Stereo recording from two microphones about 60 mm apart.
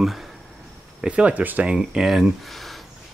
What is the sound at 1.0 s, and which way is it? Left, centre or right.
Speech, centre.